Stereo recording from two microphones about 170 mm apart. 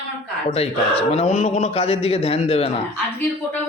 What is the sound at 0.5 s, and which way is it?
A man's voice, 35° left (ahead or behind).